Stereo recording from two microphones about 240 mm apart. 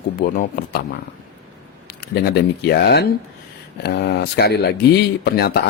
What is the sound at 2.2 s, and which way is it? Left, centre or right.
Speech, left.